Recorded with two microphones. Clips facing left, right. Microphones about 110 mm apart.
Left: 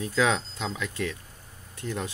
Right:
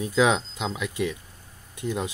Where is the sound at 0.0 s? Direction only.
15° right (ahead or behind).